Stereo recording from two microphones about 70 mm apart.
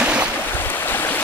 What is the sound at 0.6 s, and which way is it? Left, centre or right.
Stream, left.